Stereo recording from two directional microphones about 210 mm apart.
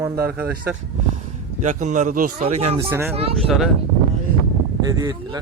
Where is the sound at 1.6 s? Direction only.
35° right (ahead or behind).